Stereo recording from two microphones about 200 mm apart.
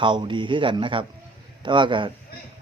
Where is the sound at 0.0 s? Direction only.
25° right (ahead or behind).